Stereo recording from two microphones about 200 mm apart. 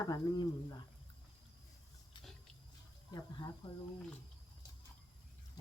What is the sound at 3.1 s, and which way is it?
Speech, 20° left (ahead or behind).